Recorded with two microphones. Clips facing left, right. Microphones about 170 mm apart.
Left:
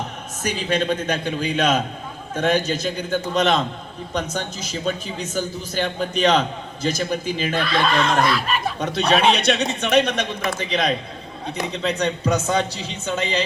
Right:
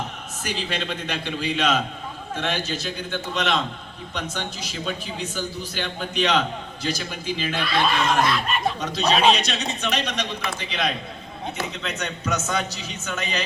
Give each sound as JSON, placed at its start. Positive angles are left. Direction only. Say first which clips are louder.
{"t": 0.4, "sound": "a man's voice", "louder": "left 7 dB", "side_deg": 45}
{"t": 8.3, "sound": "speech", "louder": "left 1 dB", "side_deg": 0}
{"t": 8.8, "sound": "a man's voice", "louder": "left 3 dB", "side_deg": 60}